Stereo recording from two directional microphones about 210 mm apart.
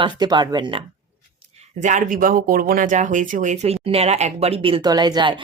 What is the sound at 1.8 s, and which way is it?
Speech, 35° right (ahead or behind).